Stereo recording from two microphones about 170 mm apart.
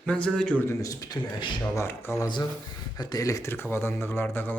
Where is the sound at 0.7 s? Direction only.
20° left (ahead or behind).